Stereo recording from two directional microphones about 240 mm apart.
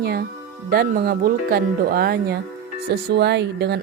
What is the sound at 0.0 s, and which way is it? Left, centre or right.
A woman's voice, right.